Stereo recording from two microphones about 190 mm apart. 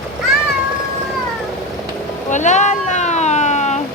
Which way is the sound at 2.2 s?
40° left (ahead or behind).